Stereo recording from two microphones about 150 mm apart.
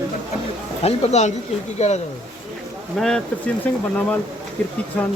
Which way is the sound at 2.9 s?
5° left (ahead or behind).